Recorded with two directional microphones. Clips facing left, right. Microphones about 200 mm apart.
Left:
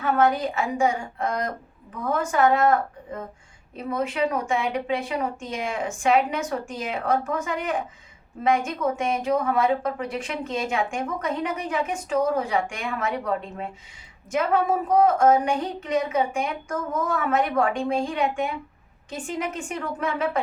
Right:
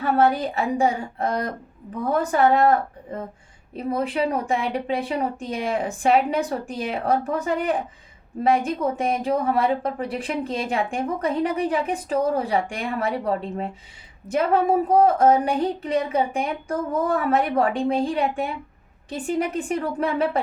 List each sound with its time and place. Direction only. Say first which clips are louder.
0.0 s speech: right 2 dB; 35° right (ahead or behind)